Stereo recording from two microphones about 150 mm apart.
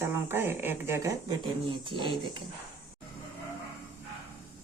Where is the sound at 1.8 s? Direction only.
35° right (ahead or behind).